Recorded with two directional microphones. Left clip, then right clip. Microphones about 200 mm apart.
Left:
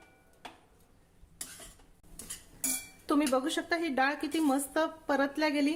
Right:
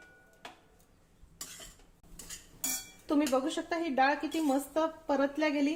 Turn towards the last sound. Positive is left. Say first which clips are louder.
# left 1 dB
turn(degrees=20)  # may be behind; listen again after turning